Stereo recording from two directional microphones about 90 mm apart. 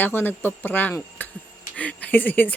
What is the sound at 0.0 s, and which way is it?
Speech, 20° left (ahead or behind).